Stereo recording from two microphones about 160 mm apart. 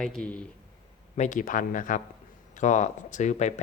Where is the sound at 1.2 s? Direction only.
55° left (ahead or behind).